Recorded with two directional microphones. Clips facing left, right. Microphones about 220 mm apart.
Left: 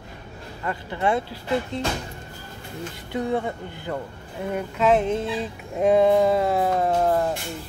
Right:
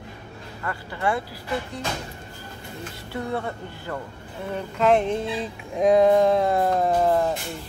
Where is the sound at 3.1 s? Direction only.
15° left (ahead or behind).